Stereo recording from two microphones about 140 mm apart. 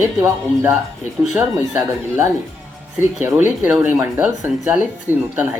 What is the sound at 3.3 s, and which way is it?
Speech, 10° right (ahead or behind).